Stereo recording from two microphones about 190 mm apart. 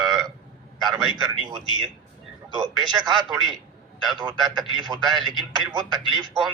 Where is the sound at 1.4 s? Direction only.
25° right (ahead or behind).